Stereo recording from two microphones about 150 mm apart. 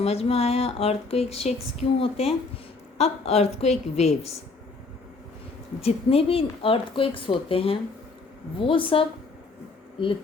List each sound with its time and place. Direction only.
0.0 s speech: 45° left (ahead or behind)
5.8 s speech: 40° left (ahead or behind)